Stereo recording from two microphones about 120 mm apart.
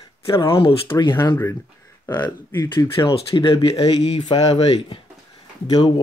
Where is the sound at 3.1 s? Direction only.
45° left (ahead or behind).